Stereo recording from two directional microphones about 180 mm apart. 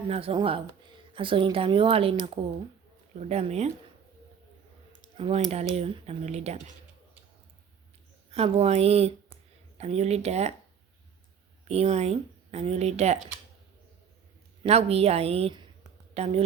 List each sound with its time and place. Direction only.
0.1 s speech: 35° right (ahead or behind)
5.1 s speech: 35° right (ahead or behind)
8.3 s speech: 35° right (ahead or behind)
11.7 s speech: 35° right (ahead or behind)
14.6 s speech: 35° right (ahead or behind)